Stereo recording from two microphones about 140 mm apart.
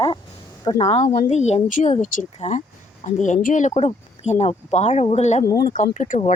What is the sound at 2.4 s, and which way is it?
Speech, 55° left (ahead or behind).